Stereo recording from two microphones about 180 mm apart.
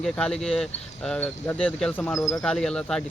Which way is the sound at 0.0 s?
5° left (ahead or behind).